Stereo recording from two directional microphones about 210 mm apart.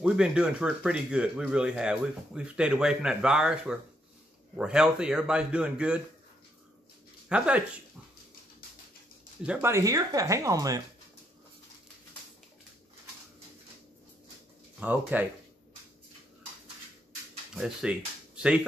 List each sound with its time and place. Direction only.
0.0 s speech: 5° right (ahead or behind)
7.2 s speech: 5° right (ahead or behind)
9.5 s speech: 10° right (ahead or behind)
14.8 s speech: 10° right (ahead or behind)
17.6 s speech: 5° right (ahead or behind)